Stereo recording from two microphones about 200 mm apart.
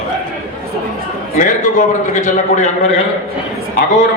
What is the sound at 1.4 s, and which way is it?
Speech, 40° left (ahead or behind).